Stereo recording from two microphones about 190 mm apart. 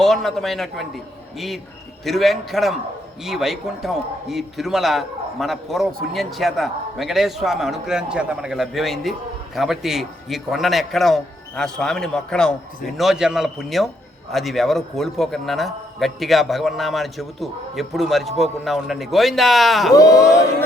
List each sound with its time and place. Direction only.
0.0 s a man's voice: centre (ahead or behind)
19.9 s speech: 20° left (ahead or behind)